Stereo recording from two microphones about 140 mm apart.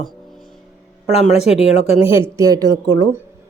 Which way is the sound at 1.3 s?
50° left (ahead or behind).